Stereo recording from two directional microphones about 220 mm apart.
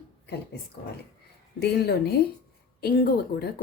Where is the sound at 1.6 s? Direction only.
50° left (ahead or behind).